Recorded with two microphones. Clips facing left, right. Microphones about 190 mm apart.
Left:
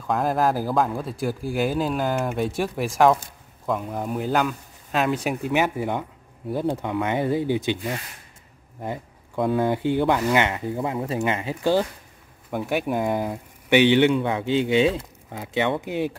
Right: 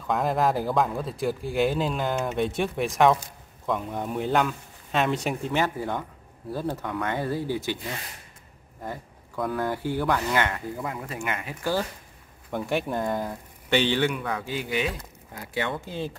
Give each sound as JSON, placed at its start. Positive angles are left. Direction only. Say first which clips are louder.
{"t": 0.0, "sound": "speech", "louder": "left 2 dB", "side_deg": 0}
{"t": 8.8, "sound": "speech", "louder": "left 5 dB", "side_deg": 20}
{"t": 12.4, "sound": "speech", "louder": "left 3 dB", "side_deg": 5}